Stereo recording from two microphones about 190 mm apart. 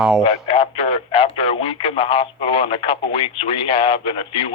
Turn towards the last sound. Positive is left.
turn(degrees=30)  # may be behind; listen again after turning